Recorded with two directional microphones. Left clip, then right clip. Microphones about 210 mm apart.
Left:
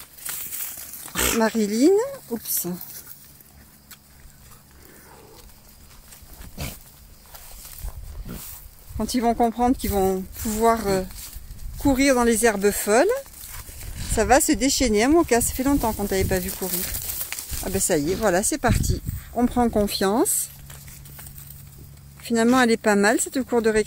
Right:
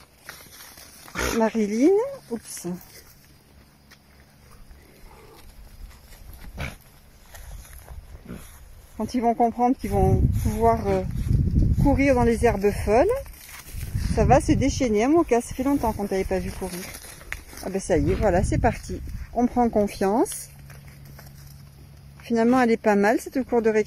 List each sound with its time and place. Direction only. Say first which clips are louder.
1.0 s a sound: left 3 dB; 20° left (ahead or behind)
1.3 s speech: even; 5° left (ahead or behind)
8.9 s speech: left 1 dB; 5° left (ahead or behind)
13.5 s a sound: even; 45° right (ahead or behind)
14.1 s speech: left 1 dB; 5° left (ahead or behind)
17.6 s speech: even; 10° left (ahead or behind)
22.1 s speech: left 1 dB; 5° left (ahead or behind)